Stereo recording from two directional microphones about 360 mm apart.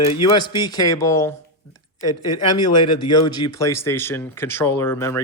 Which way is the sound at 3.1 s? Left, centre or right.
Centre.